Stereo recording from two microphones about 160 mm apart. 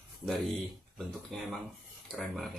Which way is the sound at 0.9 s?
Centre (ahead or behind).